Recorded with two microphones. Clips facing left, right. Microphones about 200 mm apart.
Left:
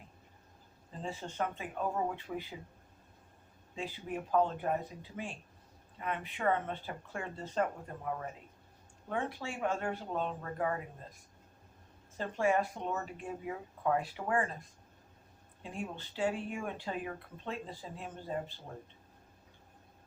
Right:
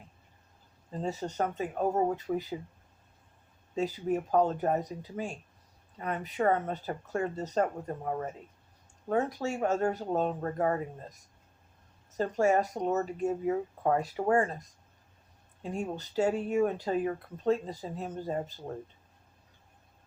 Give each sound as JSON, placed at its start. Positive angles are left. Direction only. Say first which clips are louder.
{"t": 1.0, "sound": "speech", "louder": "right 5 dB", "side_deg": -40}
{"t": 3.8, "sound": "speech", "louder": "right 9 dB", "side_deg": -40}